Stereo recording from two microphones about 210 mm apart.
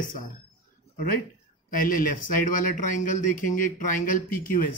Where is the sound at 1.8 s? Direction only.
40° left (ahead or behind).